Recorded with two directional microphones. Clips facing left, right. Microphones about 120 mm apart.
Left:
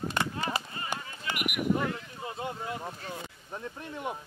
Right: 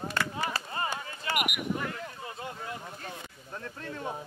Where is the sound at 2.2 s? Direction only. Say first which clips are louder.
Left 3 dB; 25° left (ahead or behind).